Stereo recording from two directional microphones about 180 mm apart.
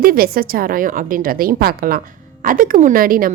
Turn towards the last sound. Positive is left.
turn(degrees=-50)  # may be behind; listen again after turning